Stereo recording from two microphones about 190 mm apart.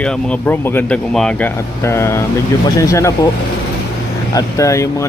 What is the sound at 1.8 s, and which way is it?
Speech, 15° left (ahead or behind).